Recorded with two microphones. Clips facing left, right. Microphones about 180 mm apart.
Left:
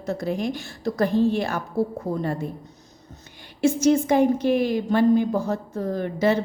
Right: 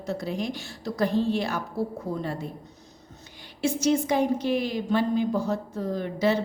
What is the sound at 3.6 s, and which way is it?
A woman's voice, 50° left (ahead or behind).